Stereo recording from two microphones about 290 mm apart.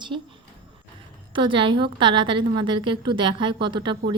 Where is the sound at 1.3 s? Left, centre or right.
Centre.